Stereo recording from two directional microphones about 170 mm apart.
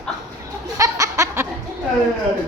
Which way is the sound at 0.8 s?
20° right (ahead or behind).